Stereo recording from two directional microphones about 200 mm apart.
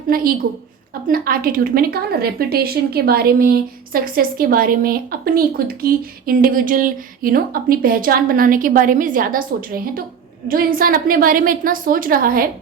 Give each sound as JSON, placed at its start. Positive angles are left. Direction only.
{"t": 0.1, "sound": "a woman's voice", "side_deg": -45}